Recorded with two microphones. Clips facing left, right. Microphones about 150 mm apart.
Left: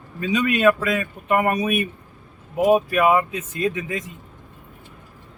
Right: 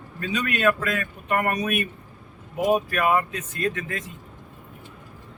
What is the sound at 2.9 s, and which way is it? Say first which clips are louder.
Speech: left 4 dB; 10° left (ahead or behind).